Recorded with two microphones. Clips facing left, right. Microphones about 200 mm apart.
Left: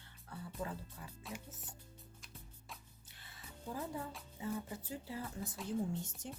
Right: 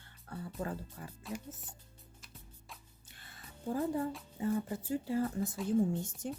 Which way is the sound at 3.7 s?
55° right (ahead or behind).